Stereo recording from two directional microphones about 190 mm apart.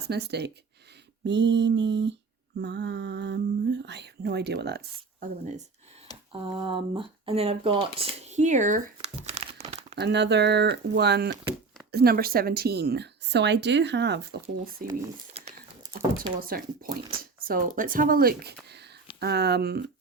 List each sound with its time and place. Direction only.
0.1 s speech: 60° right (ahead or behind)
1.2 s a sound: 65° right (ahead or behind)
2.6 s speech: 65° right (ahead or behind)
6.6 s speech: 25° right (ahead or behind)
9.9 s speech: 60° right (ahead or behind)
15.3 s crumpling: 35° right (ahead or behind)
16.4 s speech: 50° right (ahead or behind)
18.7 s a sound: 60° right (ahead or behind)
19.2 s speech: 60° right (ahead or behind)